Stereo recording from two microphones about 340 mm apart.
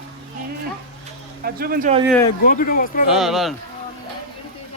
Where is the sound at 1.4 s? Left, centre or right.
Right.